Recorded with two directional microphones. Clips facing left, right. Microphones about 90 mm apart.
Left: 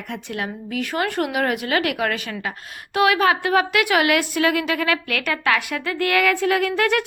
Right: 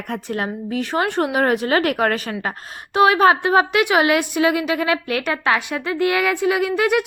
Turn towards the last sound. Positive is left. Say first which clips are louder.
# right 2 dB
turn(degrees=-15)  # may be behind; listen again after turning